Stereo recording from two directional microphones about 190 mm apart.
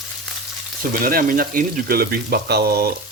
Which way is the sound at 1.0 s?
50° right (ahead or behind).